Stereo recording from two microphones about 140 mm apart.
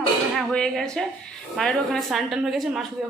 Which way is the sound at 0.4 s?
5° left (ahead or behind).